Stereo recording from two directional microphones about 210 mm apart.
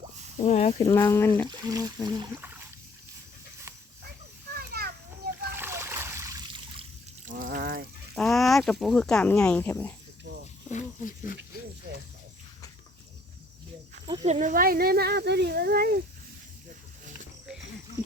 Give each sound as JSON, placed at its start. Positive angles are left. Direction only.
{"t": 0.4, "sound": "speech", "side_deg": 35}
{"t": 0.8, "sound": "speech", "side_deg": 15}
{"t": 1.5, "sound": "speech", "side_deg": -15}
{"t": 4.5, "sound": "children playing", "side_deg": -45}
{"t": 5.5, "sound": "splash", "side_deg": -10}
{"t": 7.3, "sound": "a sound", "side_deg": -40}
{"t": 8.1, "sound": "speech", "side_deg": 0}
{"t": 10.7, "sound": "speech", "side_deg": 40}
{"t": 14.1, "sound": "speech", "side_deg": -30}